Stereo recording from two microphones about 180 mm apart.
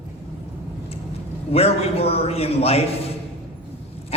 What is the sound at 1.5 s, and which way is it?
A man's voice, 35° left (ahead or behind).